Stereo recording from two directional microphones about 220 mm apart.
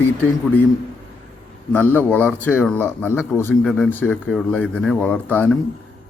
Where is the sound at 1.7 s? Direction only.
10° left (ahead or behind).